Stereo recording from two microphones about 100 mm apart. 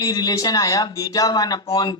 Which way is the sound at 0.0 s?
40° left (ahead or behind).